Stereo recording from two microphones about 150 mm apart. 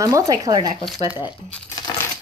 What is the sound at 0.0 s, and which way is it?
Speech, 20° right (ahead or behind).